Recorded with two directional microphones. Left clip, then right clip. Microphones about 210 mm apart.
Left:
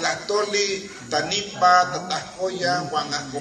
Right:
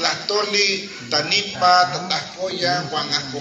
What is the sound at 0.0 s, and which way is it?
A man's voice, 65° left (ahead or behind).